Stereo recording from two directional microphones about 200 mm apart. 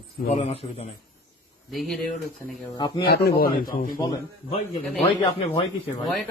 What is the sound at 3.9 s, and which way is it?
Speech, 20° left (ahead or behind).